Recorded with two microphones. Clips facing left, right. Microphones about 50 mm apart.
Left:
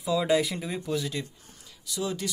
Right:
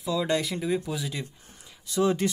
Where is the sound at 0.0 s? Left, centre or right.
Centre.